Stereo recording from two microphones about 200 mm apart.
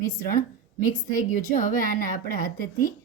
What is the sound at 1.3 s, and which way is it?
Speech, 40° left (ahead or behind).